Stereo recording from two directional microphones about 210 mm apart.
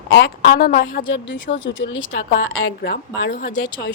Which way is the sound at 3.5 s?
60° left (ahead or behind).